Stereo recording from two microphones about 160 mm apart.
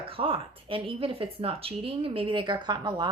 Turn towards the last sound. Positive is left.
turn(degrees=-30)  # may be behind; listen again after turning